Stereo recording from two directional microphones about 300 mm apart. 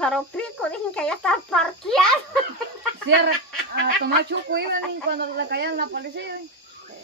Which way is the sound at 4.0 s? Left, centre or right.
Right.